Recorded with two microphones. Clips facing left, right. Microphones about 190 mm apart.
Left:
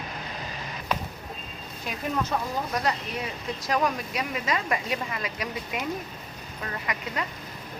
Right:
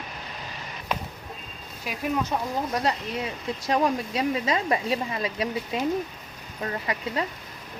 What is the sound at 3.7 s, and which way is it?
Speech, 30° right (ahead or behind).